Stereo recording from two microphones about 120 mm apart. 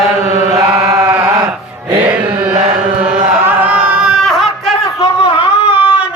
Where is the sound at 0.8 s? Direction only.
30° right (ahead or behind).